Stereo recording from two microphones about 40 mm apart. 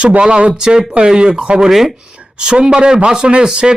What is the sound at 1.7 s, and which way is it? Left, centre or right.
Speech, centre.